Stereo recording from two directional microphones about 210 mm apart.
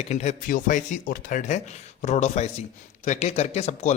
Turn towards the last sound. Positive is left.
turn(degrees=30)  # may be behind; listen again after turning